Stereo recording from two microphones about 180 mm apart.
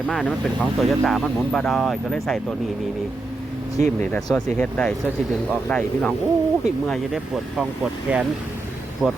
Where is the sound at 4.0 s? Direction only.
5° left (ahead or behind).